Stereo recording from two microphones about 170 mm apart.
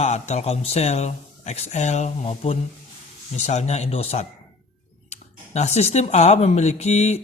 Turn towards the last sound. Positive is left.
turn(degrees=40)  # may be behind; listen again after turning